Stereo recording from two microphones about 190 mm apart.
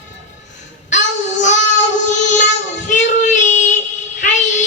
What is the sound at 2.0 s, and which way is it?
Child singing, 40° left (ahead or behind).